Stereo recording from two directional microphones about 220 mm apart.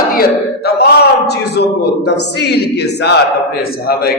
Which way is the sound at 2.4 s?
50° left (ahead or behind).